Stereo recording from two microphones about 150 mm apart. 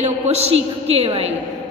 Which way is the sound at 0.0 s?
45° right (ahead or behind).